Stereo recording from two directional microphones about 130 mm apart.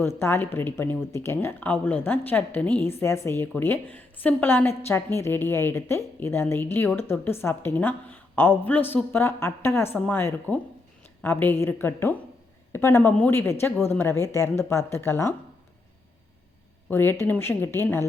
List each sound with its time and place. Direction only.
0.0 s speech: 20° left (ahead or behind)
16.9 s speech: 15° left (ahead or behind)